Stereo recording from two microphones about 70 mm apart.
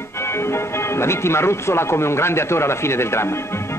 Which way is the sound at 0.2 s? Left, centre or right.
Left.